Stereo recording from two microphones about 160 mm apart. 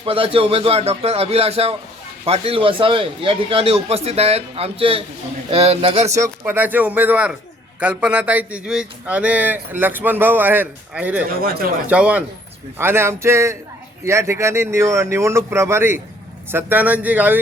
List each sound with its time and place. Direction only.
0.0 s a man's voice: 35° right (ahead or behind)
6.1 s speech: 20° right (ahead or behind)
11.3 s speech: 65° right (ahead or behind)
11.9 s speech: 10° right (ahead or behind)